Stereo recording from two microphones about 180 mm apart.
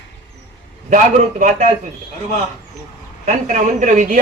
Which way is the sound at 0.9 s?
45° right (ahead or behind).